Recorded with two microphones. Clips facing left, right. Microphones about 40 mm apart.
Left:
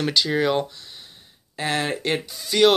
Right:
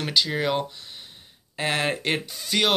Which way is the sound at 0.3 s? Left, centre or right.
Centre.